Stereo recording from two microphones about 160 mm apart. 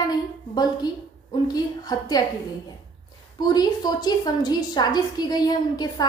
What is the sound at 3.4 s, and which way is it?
A woman's voice, 25° left (ahead or behind).